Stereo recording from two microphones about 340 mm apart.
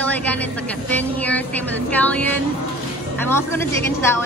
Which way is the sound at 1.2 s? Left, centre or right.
Centre.